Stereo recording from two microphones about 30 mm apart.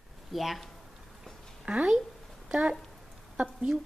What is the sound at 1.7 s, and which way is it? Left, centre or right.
Speech, right.